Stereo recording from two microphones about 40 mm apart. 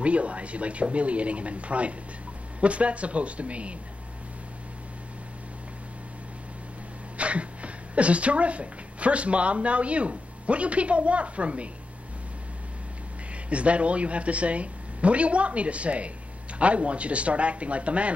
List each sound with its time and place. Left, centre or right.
0.0 s speech: right
7.2 s speech: right
13.5 s speech: right